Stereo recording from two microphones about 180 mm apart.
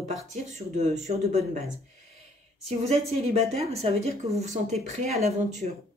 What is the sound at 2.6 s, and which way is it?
Speech, 35° right (ahead or behind).